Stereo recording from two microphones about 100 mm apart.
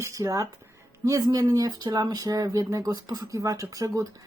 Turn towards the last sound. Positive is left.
turn(degrees=-35)  # may be behind; listen again after turning